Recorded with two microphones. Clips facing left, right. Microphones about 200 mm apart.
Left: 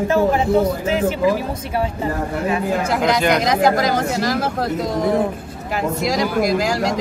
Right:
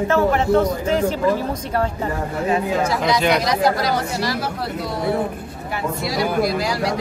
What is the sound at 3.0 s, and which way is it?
Speech, centre (ahead or behind).